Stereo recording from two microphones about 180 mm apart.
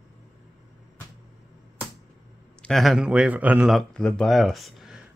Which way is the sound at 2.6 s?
Centre (ahead or behind).